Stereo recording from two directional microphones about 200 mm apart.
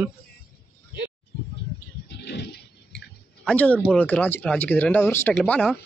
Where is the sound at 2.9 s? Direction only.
5° left (ahead or behind).